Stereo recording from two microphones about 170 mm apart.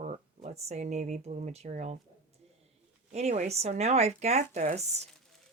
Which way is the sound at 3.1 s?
40° right (ahead or behind).